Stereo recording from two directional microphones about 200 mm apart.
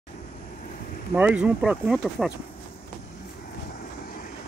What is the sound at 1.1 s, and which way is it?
Speech, 5° right (ahead or behind).